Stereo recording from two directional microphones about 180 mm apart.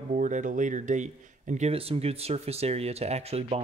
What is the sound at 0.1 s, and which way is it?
Speech, 45° right (ahead or behind).